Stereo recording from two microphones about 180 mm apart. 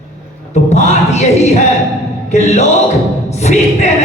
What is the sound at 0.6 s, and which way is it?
Speech, 40° left (ahead or behind).